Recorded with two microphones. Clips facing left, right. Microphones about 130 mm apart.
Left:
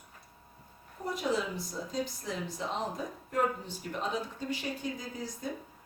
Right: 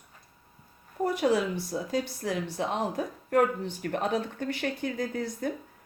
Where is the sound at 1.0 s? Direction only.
70° right (ahead or behind).